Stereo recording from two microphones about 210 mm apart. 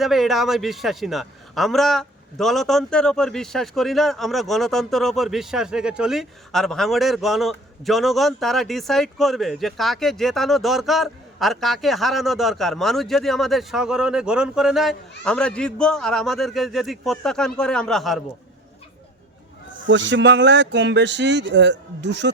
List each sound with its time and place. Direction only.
0.0 s a man's voice: centre (ahead or behind)
19.9 s speech: 60° right (ahead or behind)